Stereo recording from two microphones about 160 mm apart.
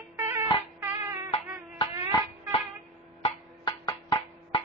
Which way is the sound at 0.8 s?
20° right (ahead or behind).